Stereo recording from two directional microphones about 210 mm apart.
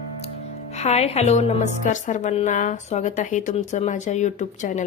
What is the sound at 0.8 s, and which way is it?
A woman's voice, 30° left (ahead or behind).